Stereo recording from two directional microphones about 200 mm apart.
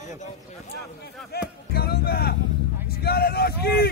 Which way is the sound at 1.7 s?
50° left (ahead or behind).